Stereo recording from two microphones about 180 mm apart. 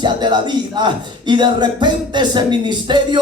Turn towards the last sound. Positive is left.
turn(degrees=-25)  # may be behind; listen again after turning